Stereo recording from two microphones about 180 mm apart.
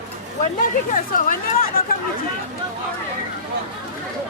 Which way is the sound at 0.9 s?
50° left (ahead or behind).